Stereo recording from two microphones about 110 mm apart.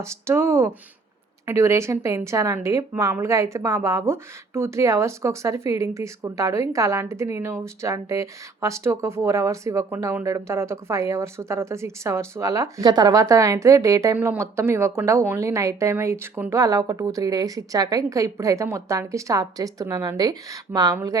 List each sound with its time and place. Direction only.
0.0 s a woman's voice: 25° right (ahead or behind)